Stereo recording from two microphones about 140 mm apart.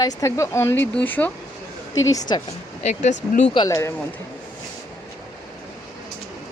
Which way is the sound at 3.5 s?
30° left (ahead or behind).